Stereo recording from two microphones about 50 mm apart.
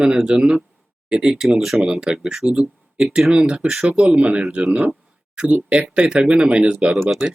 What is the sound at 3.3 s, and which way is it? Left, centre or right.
Speech, centre.